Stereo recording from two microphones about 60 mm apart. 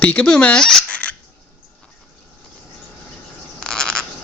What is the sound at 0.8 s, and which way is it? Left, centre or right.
Fowl, centre.